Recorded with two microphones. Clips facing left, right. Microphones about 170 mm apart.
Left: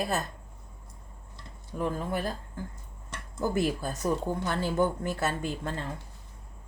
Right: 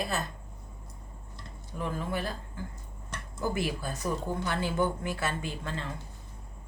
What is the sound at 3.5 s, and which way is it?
Cutlery, 45° left (ahead or behind).